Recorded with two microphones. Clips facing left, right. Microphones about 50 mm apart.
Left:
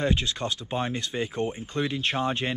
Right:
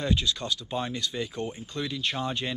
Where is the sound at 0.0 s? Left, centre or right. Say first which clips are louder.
Left 2 dB; left.